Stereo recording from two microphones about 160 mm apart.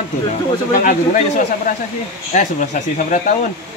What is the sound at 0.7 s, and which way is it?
Speech, 55° left (ahead or behind).